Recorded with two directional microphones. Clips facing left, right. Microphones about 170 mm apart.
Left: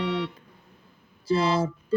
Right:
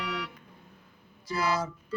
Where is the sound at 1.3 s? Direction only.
30° left (ahead or behind).